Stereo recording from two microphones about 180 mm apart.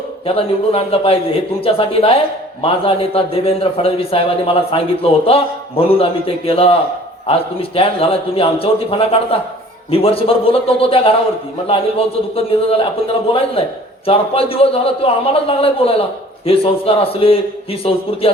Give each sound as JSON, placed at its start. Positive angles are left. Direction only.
{"t": 0.3, "sound": "speech", "side_deg": 30}